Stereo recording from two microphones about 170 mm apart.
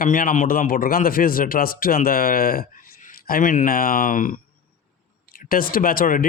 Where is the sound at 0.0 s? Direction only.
55° left (ahead or behind).